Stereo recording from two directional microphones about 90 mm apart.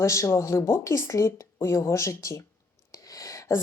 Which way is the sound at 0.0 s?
35° left (ahead or behind).